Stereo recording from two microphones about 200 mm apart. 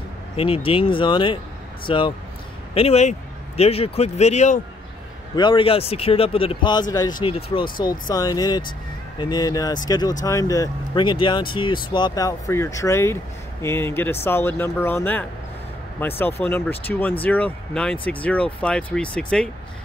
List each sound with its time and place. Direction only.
0.7 s a man's voice: 25° left (ahead or behind)
5.3 s a man's voice: 20° left (ahead or behind); by 19.5 s 5° left (ahead or behind)